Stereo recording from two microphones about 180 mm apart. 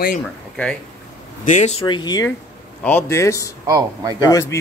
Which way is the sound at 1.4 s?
45° left (ahead or behind).